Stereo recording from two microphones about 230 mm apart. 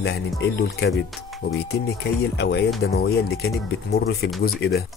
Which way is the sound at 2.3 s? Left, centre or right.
Left.